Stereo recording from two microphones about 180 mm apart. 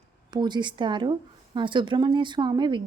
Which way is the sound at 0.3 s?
25° right (ahead or behind).